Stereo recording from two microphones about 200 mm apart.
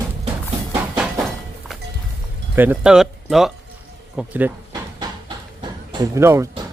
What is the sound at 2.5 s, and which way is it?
Speech, 10° right (ahead or behind).